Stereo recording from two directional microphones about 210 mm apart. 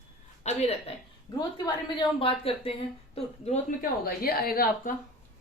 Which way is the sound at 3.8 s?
45° left (ahead or behind).